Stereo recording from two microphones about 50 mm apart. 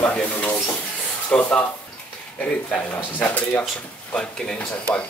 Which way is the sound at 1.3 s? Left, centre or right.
Left.